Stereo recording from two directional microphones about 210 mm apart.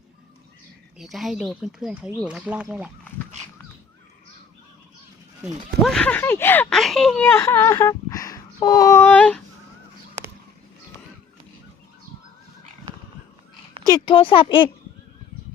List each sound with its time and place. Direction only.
0.9 s speech: centre (ahead or behind)
5.8 s speech: 5° left (ahead or behind)
13.9 s speech: 25° left (ahead or behind)